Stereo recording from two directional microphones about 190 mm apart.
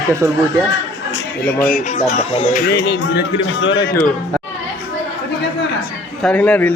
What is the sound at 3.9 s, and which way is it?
Speech, 5° left (ahead or behind).